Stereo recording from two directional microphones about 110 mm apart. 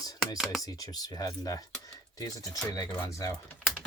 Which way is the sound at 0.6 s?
35° left (ahead or behind).